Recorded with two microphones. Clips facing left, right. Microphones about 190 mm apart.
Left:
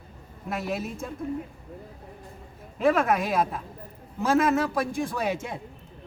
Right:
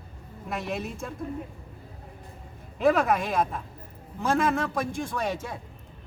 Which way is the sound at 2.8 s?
Centre (ahead or behind).